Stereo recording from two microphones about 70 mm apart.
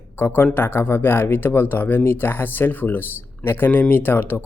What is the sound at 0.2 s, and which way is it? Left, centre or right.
Speech, left.